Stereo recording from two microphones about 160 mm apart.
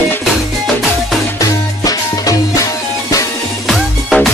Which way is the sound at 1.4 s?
20° left (ahead or behind).